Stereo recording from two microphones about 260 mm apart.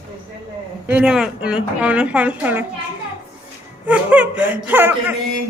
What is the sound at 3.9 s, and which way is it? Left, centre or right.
Speech, centre.